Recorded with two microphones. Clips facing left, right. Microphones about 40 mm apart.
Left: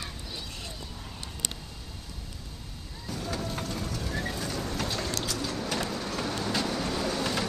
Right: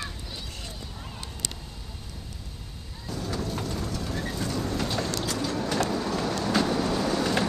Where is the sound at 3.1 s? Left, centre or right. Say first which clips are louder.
Right 2 dB; left.